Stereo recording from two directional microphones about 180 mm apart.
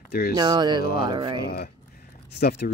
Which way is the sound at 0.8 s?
55° left (ahead or behind).